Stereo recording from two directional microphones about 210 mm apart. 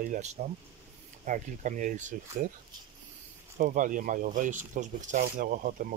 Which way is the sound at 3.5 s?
40° right (ahead or behind).